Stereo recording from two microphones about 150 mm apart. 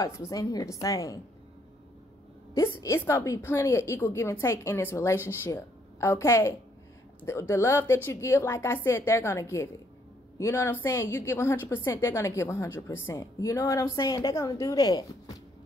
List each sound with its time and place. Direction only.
0.0 s a woman's voice: 20° left (ahead or behind)
2.5 s a woman's voice: 20° left (ahead or behind)